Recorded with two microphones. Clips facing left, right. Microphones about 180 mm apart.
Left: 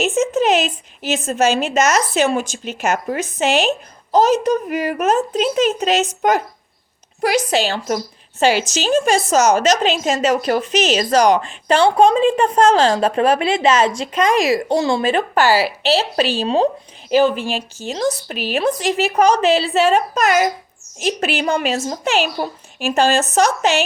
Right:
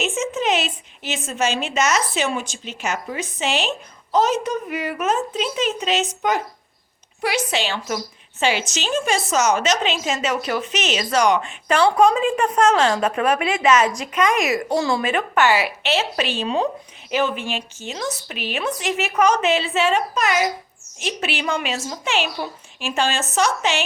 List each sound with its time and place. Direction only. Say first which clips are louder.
0.0 s a woman's voice: left 6 dB; 40° left (ahead or behind)
7.2 s a woman's voice: left 6 dB; 40° left (ahead or behind)